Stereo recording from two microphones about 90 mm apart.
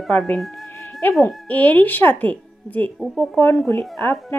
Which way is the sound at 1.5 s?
20° left (ahead or behind).